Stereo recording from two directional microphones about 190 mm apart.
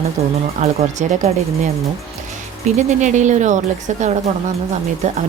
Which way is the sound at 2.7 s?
40° right (ahead or behind).